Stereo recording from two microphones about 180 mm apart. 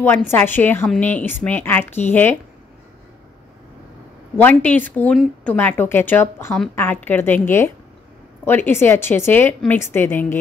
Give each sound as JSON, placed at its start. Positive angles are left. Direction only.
{"t": 0.3, "sound": "a woman's voice", "side_deg": 10}
{"t": 4.4, "sound": "a woman's voice", "side_deg": 10}